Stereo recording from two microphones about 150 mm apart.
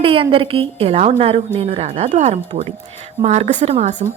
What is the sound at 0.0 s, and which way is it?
A woman's voice, 35° right (ahead or behind).